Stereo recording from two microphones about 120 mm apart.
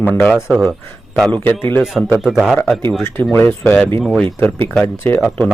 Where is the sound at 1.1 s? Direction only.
10° left (ahead or behind).